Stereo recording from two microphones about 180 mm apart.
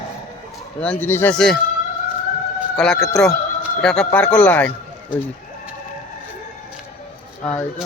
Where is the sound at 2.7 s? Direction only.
5° left (ahead or behind).